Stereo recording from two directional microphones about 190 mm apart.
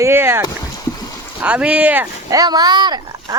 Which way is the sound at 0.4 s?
20° left (ahead or behind).